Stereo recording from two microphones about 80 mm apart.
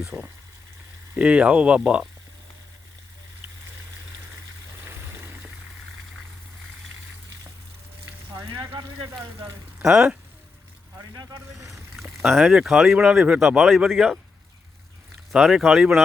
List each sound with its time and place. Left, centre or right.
0.1 s speech: right
1.1 s speech: centre
4.9 s water: right
8.3 s frying: right
8.6 s speech: right
9.8 s speech: centre
11.1 s speech: right
12.2 s speech: centre
15.3 s speech: centre